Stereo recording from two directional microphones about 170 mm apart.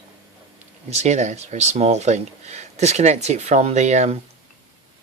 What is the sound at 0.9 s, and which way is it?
Speech, 40° right (ahead or behind).